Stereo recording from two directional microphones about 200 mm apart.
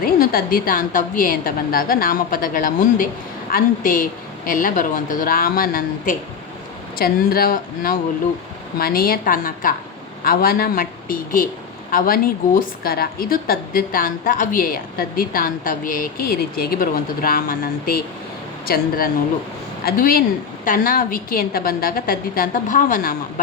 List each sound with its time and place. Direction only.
0.0 s a woman's voice: 45° left (ahead or behind)